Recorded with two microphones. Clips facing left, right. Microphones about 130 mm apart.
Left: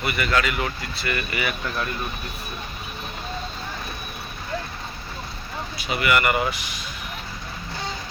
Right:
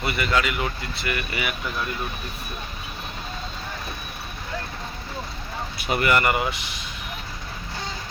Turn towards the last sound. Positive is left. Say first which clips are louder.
# left 1 dB
turn(degrees=-25)  # may be behind; listen again after turning